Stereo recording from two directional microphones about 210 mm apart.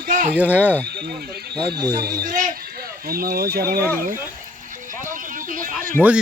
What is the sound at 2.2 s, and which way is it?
A man's voice, 40° right (ahead or behind).